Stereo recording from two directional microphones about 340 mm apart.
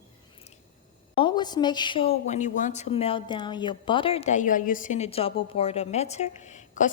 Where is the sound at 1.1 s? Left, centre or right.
Centre.